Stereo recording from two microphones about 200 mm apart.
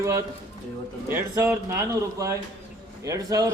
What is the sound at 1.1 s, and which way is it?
A man's voice, 10° right (ahead or behind).